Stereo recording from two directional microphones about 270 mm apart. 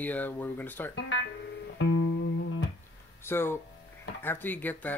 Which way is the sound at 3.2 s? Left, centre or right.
Centre.